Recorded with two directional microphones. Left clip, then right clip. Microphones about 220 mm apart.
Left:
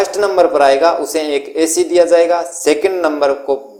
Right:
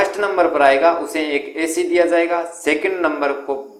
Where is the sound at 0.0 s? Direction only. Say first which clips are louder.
Left 4 dB; 50° left (ahead or behind).